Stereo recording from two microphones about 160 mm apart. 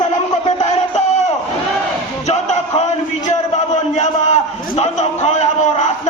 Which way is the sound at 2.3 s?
45° left (ahead or behind).